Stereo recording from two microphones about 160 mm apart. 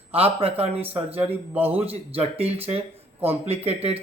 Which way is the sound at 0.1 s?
40° right (ahead or behind).